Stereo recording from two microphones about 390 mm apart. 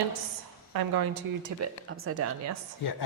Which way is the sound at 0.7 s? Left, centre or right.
Right.